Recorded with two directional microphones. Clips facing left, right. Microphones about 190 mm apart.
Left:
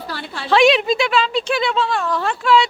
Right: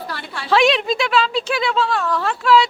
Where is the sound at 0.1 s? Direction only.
30° left (ahead or behind).